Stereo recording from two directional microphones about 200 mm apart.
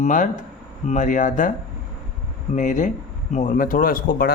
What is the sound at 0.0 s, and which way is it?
Speech, 40° left (ahead or behind).